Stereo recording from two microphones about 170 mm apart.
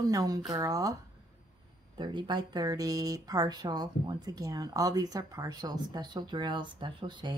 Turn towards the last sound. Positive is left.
turn(degrees=-25)  # may be behind; listen again after turning